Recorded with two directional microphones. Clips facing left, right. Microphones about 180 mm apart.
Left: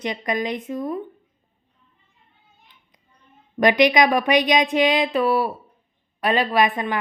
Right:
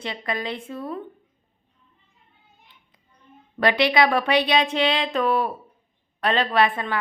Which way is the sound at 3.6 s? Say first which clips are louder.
Left 3 dB; 15° left (ahead or behind).